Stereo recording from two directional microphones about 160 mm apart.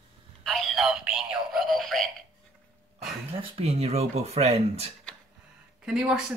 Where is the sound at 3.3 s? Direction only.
40° right (ahead or behind).